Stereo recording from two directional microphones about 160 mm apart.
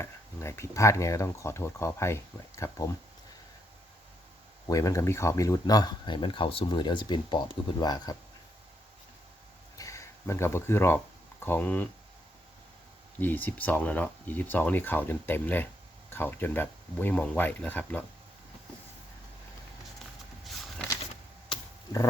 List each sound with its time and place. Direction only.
0.0 s speech: 15° left (ahead or behind)
4.7 s speech: 20° left (ahead or behind)
9.7 s a sound: 20° left (ahead or behind)
13.1 s speech: 10° left (ahead or behind)